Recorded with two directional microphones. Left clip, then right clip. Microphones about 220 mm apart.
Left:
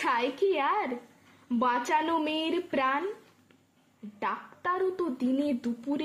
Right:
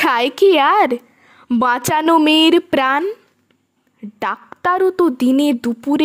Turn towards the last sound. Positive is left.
turn(degrees=-50)  # may be behind; listen again after turning